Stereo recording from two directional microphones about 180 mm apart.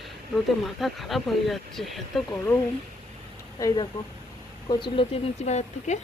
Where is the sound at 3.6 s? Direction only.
20° left (ahead or behind).